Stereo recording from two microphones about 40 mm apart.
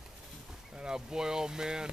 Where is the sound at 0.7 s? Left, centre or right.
Centre.